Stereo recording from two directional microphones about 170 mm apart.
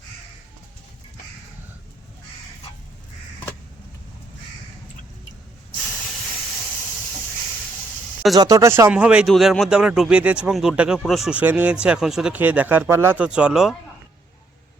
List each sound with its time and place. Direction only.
8.4 s speech: 20° right (ahead or behind); by 13.7 s centre (ahead or behind)